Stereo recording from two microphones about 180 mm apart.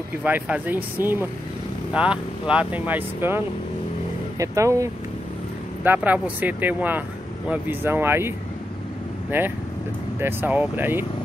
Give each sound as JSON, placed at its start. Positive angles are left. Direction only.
{"t": 0.2, "sound": "speech", "side_deg": -10}
{"t": 5.9, "sound": "speech", "side_deg": -10}
{"t": 9.3, "sound": "speech", "side_deg": -10}